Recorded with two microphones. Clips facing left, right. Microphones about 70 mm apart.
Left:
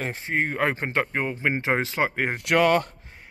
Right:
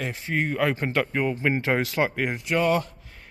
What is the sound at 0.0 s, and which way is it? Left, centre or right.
Speech, left.